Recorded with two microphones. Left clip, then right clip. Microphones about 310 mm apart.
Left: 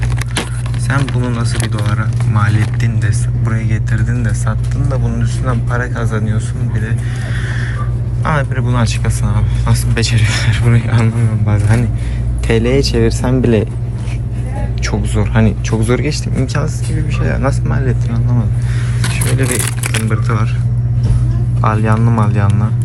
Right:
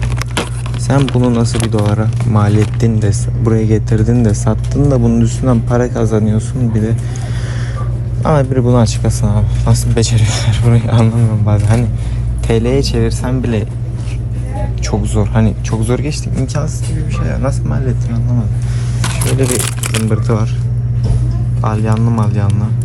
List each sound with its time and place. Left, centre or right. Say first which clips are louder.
0.9 s a man's voice: right 5 dB; centre
8.2 s speech: right 4 dB; centre
14.8 s speech: right 1 dB; centre
21.6 s speech: left 3 dB; centre